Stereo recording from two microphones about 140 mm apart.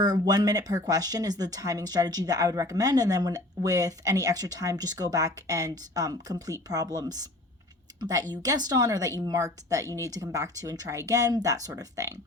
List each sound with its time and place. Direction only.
0.0 s speech: 30° right (ahead or behind)